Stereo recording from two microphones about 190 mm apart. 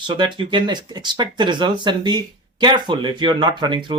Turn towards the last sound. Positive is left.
turn(degrees=-25)  # may be behind; listen again after turning